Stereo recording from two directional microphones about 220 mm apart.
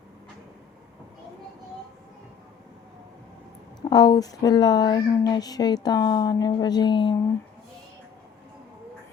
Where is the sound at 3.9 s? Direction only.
20° left (ahead or behind).